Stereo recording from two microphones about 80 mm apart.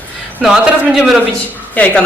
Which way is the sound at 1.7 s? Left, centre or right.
Centre.